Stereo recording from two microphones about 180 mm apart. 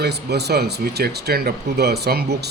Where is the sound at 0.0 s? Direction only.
65° right (ahead or behind).